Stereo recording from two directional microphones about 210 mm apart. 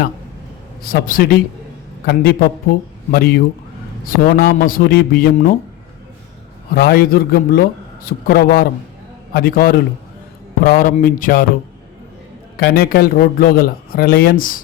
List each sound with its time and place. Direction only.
0.9 s a man's voice: 45° left (ahead or behind)
6.7 s a man's voice: 50° left (ahead or behind)
12.5 s a man's voice: 50° left (ahead or behind)